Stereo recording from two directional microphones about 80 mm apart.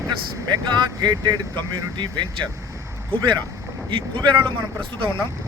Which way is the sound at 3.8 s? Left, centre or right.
Right.